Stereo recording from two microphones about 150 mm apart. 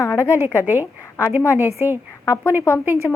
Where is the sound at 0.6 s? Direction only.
15° right (ahead or behind).